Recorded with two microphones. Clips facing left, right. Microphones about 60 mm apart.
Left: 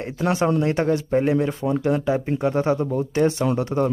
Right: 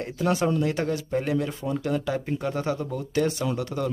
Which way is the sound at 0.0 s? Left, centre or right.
Left.